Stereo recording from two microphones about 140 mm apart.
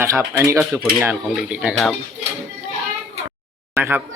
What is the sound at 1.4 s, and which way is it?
Speech, 5° right (ahead or behind).